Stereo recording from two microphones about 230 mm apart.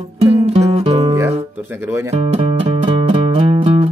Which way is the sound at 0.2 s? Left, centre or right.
Right.